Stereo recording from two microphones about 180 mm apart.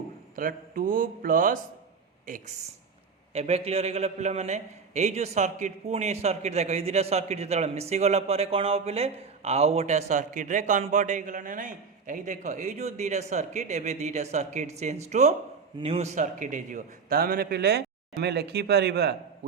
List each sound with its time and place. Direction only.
0.3 s speech: 50° right (ahead or behind)
3.3 s a man's voice: 35° right (ahead or behind); by 19.1 s 65° right (ahead or behind)